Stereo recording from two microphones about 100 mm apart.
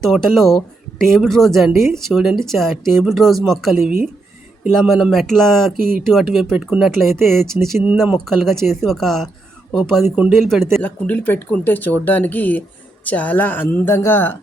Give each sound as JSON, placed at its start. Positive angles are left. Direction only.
{"t": 0.0, "sound": "speech", "side_deg": 0}
{"t": 10.8, "sound": "speech", "side_deg": 15}